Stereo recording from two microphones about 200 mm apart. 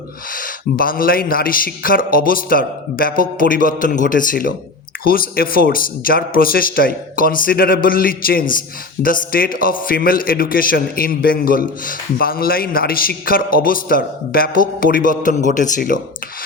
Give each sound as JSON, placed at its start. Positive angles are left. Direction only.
{"t": 0.3, "sound": "a man's voice", "side_deg": 45}